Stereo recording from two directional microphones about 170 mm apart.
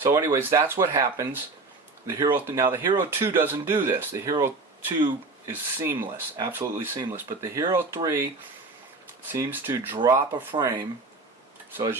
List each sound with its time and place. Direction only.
0.0 s speech: 20° right (ahead or behind)
9.3 s speech: 15° right (ahead or behind)
9.9 s speech: 25° right (ahead or behind)